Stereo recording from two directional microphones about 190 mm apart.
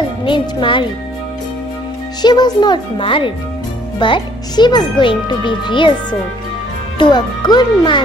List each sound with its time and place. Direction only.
0.2 s a child's voice: 25° left (ahead or behind)
2.2 s a child's voice: 20° left (ahead or behind)
7.0 s a child's voice: 20° left (ahead or behind)